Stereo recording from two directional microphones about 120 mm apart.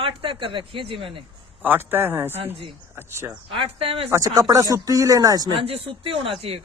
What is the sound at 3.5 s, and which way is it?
Speech, 50° right (ahead or behind).